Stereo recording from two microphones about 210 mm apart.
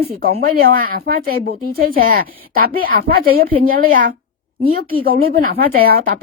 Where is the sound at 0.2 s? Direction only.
50° right (ahead or behind).